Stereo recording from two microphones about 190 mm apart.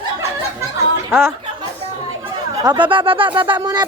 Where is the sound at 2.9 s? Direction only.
25° right (ahead or behind).